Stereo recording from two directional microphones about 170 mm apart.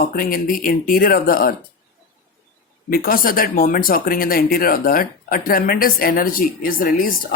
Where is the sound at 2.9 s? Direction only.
55° left (ahead or behind).